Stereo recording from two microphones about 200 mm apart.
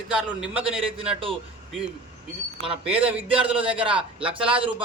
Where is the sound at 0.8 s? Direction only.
25° right (ahead or behind).